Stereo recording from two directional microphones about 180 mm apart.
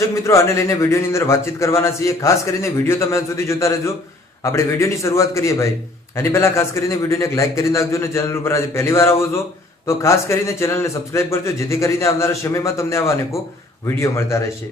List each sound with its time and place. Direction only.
0.3 s a man's voice: 15° left (ahead or behind)